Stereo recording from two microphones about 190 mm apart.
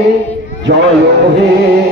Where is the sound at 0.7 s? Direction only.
55° right (ahead or behind).